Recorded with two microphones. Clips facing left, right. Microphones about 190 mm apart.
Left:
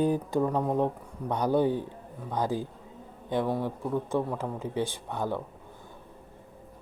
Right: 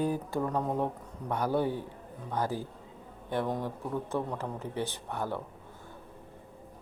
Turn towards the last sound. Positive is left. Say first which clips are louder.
# left 3 dB
turn(degrees=15)  # may be behind; listen again after turning